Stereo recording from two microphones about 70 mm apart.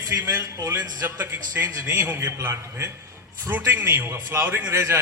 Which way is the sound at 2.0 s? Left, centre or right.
Right.